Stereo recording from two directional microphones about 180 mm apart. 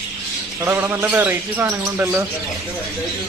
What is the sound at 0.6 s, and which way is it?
Speech, 10° right (ahead or behind).